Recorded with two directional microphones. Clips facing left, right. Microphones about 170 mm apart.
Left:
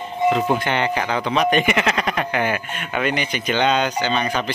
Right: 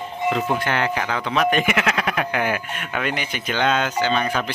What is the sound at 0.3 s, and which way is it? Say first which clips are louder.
Speech: left 1 dB; 10° left (ahead or behind).